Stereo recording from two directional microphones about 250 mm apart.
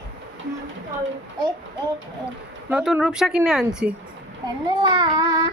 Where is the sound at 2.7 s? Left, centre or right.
Centre.